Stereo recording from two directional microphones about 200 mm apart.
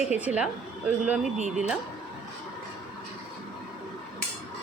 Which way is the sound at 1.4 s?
35° right (ahead or behind).